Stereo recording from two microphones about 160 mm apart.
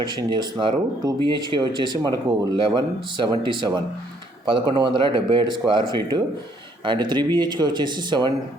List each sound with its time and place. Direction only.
0.0 s speech: 25° right (ahead or behind)
4.7 s speech: 30° right (ahead or behind)